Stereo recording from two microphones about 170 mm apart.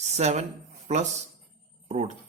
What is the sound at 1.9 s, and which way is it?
Speech, 45° right (ahead or behind).